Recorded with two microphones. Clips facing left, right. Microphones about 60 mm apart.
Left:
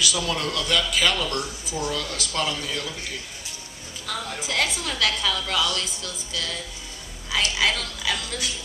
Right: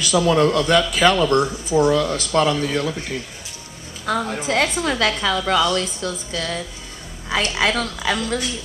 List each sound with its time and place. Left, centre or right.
0.0 s speech: right